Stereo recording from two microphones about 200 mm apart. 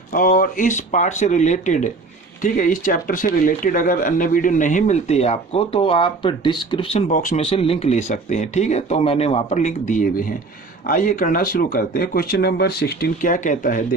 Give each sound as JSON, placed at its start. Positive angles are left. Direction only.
{"t": 0.1, "sound": "speech", "side_deg": 45}
{"t": 7.1, "sound": "speech", "side_deg": 40}
{"t": 7.4, "sound": "speech", "side_deg": 30}